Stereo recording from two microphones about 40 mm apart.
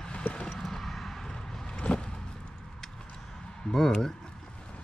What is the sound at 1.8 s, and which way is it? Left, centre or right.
Vehicle, left.